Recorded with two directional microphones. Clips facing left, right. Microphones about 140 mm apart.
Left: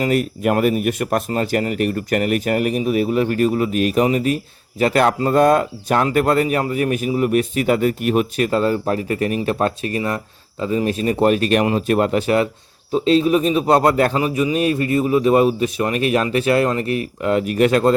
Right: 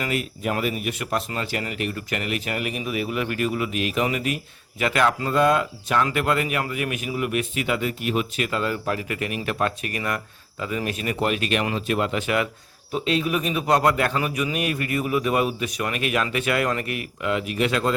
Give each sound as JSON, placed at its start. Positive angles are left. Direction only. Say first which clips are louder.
{"t": 0.0, "sound": "speech", "louder": "left 8 dB", "side_deg": 40}